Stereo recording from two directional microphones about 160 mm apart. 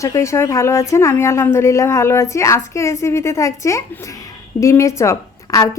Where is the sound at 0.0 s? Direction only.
20° left (ahead or behind).